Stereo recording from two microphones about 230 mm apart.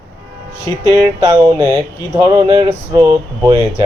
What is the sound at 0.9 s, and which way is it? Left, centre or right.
Speech, centre.